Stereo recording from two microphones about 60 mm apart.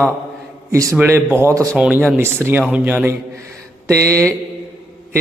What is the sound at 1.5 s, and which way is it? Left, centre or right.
Speech, right.